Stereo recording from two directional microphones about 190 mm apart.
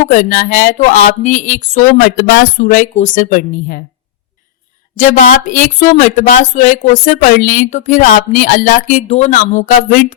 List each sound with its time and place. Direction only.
0.1 s speech: 45° left (ahead or behind)
2.0 s speech: 55° left (ahead or behind)
4.9 s speech: 40° left (ahead or behind)